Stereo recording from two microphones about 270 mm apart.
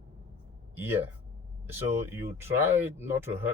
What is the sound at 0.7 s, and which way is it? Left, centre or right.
Speech, centre.